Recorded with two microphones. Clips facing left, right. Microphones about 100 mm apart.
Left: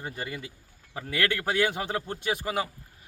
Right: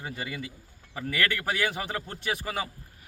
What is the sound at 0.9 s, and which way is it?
A man's voice, 20° left (ahead or behind).